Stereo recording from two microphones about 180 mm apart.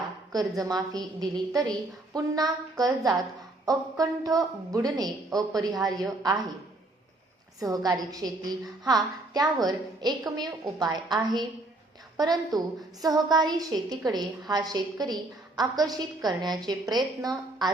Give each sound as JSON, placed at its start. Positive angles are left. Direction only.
{"t": 0.3, "sound": "a woman's voice", "side_deg": -20}
{"t": 7.6, "sound": "a woman's voice", "side_deg": -20}